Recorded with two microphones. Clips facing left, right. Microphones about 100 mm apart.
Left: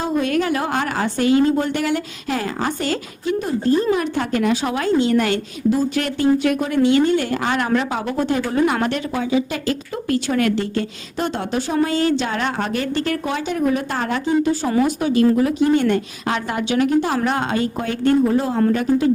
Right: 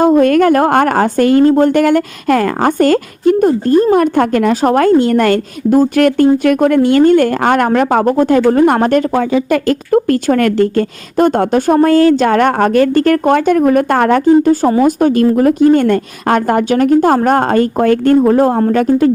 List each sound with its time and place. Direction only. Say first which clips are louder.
0.0 s a woman's voice: right 11 dB; 50° right (ahead or behind)